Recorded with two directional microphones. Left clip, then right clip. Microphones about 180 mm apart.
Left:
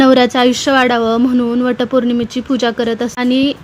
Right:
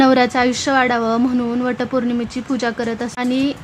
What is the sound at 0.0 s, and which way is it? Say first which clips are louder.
A woman's voice: left 4 dB; 15° left (ahead or behind).